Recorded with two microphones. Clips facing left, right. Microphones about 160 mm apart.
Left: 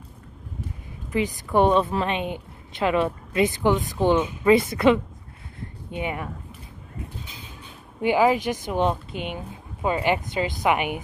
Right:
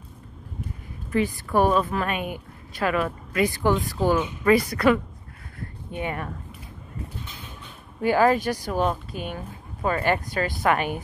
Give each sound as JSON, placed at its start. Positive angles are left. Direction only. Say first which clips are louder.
{"t": 1.1, "sound": "a woman's voice", "louder": "even", "side_deg": 15}
{"t": 8.0, "sound": "a woman's voice", "louder": "even", "side_deg": 15}